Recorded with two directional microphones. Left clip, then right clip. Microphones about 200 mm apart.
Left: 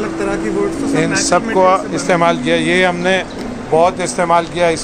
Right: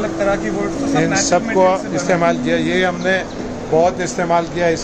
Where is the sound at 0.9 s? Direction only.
Centre (ahead or behind).